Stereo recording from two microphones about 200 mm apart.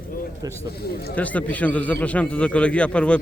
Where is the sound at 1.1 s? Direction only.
5° left (ahead or behind).